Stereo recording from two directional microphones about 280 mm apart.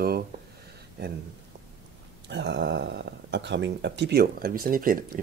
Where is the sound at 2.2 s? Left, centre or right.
Right.